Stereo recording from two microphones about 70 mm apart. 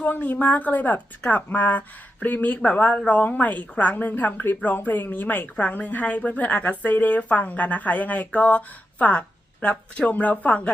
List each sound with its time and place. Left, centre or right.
0.0 s a woman's voice: left